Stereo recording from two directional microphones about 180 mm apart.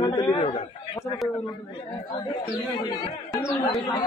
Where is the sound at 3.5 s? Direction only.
Centre (ahead or behind).